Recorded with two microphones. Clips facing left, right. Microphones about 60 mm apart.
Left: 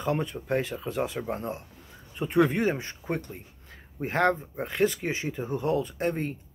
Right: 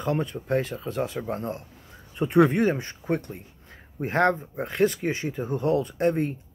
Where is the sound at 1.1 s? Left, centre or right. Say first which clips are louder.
Right 2 dB; centre.